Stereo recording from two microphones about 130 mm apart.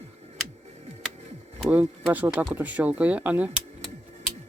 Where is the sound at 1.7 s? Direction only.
10° right (ahead or behind).